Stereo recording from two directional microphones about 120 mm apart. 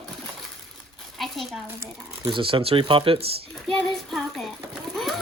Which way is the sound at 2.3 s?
50° right (ahead or behind).